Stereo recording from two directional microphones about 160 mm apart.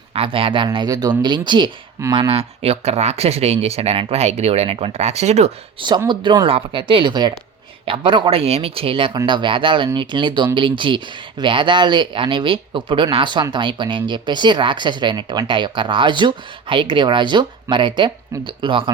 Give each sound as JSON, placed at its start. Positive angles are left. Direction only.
{"t": 0.1, "sound": "speech", "side_deg": -35}
{"t": 6.1, "sound": "speech", "side_deg": -30}